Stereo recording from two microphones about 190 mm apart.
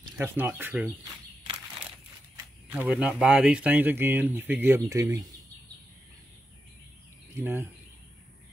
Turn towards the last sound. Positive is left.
turn(degrees=-10)  # may be behind; listen again after turning